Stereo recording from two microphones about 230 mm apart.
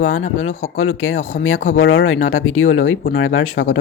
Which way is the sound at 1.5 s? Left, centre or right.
Left.